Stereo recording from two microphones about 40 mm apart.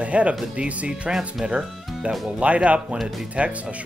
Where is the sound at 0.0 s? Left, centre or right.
Right.